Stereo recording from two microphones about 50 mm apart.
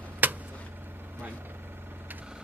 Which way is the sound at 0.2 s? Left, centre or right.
Right.